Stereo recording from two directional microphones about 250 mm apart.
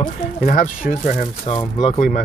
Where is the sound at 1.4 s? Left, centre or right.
Left.